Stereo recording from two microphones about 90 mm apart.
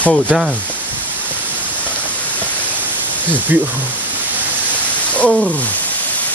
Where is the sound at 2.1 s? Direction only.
15° left (ahead or behind).